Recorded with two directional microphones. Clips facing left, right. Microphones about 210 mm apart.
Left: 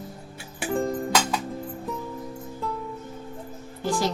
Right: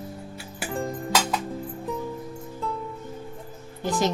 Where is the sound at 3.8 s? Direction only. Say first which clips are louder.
Right 1 dB; 20° right (ahead or behind).